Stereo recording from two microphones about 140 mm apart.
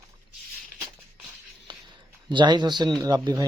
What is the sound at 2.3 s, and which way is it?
Speech, 35° right (ahead or behind).